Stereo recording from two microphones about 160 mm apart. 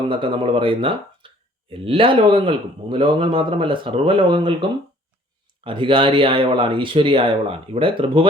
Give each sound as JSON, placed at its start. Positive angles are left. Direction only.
{"t": 0.1, "sound": "speech", "side_deg": -30}
{"t": 5.6, "sound": "speech", "side_deg": -30}